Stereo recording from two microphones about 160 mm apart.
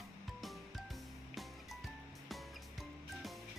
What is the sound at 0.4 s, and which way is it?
Music, centre (ahead or behind).